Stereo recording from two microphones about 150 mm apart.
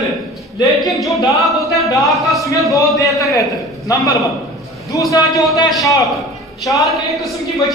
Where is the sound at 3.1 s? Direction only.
20° left (ahead or behind).